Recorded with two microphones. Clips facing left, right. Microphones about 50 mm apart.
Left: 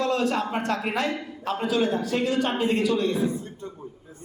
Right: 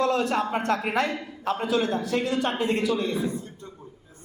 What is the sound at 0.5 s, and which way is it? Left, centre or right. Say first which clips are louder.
A man's voice: right 2 dB; centre.